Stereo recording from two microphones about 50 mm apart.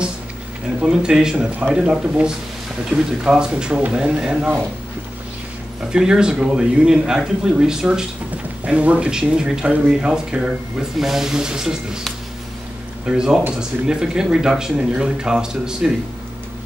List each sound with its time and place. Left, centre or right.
0.8 s speech: centre
5.9 s speech: centre
8.6 s speech: right
13.0 s speech: centre